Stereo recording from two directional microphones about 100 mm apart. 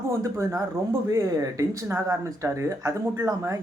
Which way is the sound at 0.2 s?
30° right (ahead or behind).